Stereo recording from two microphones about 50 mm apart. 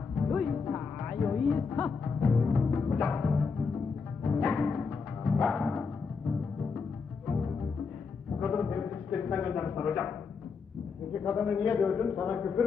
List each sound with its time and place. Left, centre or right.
0.2 s music: centre
4.4 s timpani: centre
4.8 s music: centre
5.4 s timpani: centre
7.3 s music: centre
8.3 s a sound: centre
9.3 s a man's voice: centre
11.1 s a man's voice: centre